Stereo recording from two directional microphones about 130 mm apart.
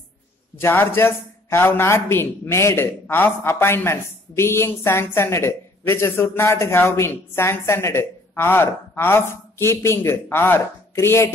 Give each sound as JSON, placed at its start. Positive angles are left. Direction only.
{"t": 0.6, "sound": "a man's voice", "side_deg": 15}